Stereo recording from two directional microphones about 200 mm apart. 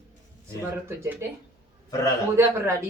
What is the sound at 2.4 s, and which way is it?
Speech, 10° right (ahead or behind).